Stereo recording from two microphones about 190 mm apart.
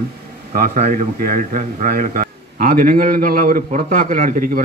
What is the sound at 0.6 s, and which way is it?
A man's voice, 40° right (ahead or behind).